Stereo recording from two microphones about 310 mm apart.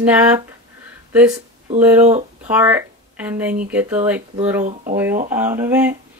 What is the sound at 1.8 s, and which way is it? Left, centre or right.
Speech, centre.